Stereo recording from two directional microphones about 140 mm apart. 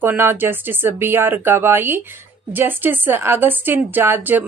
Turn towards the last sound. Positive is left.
turn(degrees=-15)  # may be behind; listen again after turning